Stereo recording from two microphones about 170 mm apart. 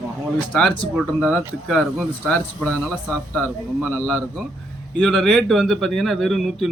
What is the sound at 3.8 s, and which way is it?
Speech, centre (ahead or behind).